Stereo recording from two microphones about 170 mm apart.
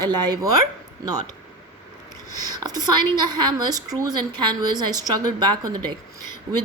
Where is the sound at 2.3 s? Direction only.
20° right (ahead or behind).